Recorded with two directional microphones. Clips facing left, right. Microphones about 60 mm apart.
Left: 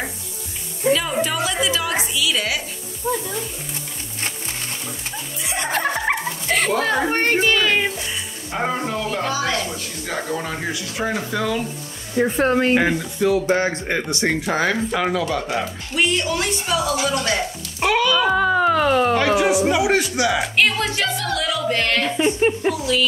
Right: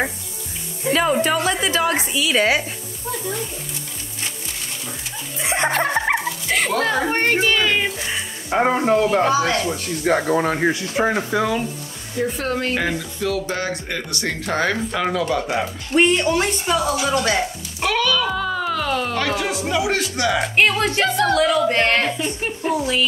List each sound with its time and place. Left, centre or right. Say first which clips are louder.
0.8 s music: left 2 dB; centre
1.2 s a sound: right 2 dB; right
2.1 s speech: right 7 dB; right
3.1 s speech: left 6 dB; centre
5.4 s chuckle: right 6 dB; right
6.0 s dog: right 1 dB; centre
6.7 s a child's voice: even; centre
8.5 s speech: right 7 dB; right
9.6 s speech: right 4 dB; right; by 11.6 s centre
12.2 s speech: left 5 dB; left; by 15.7 s centre
15.9 s speech: right 5 dB; right
17.7 s speech: left 2 dB; centre
20.8 s speech: right 5 dB; right
22.1 s speech: left 7 dB; left